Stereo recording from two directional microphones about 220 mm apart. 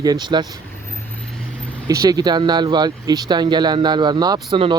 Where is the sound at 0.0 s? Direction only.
20° right (ahead or behind).